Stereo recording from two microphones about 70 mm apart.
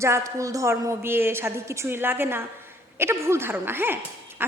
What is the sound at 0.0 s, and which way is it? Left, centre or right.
A woman's voice, right.